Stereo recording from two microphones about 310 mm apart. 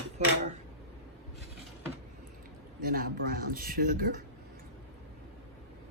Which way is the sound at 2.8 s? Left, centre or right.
Right.